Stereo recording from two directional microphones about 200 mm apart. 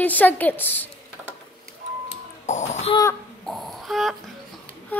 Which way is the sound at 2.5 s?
35° left (ahead or behind).